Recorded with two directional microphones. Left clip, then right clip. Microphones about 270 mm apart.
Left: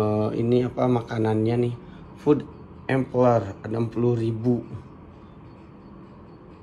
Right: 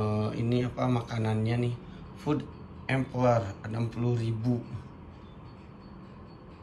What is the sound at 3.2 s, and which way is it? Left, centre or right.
Speech, centre.